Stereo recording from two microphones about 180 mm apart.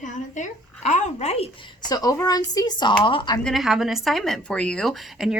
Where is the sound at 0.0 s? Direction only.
45° left (ahead or behind).